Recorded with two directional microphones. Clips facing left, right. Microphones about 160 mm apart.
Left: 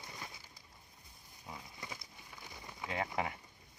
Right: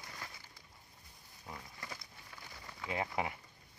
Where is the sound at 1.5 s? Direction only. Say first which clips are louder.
Even; 10° left (ahead or behind).